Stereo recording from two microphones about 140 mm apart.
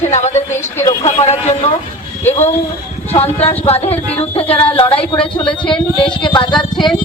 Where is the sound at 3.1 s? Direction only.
45° left (ahead or behind).